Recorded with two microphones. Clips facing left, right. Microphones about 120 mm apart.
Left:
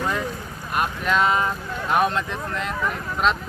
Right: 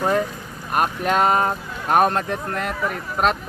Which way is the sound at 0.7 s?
45° right (ahead or behind).